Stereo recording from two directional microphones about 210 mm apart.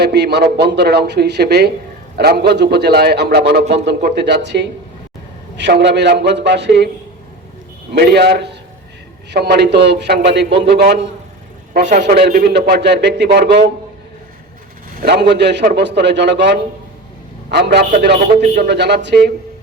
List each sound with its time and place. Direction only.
0.0 s a man's voice: 55° right (ahead or behind)
7.9 s a man's voice: 50° right (ahead or behind)
15.0 s a man's voice: 50° right (ahead or behind)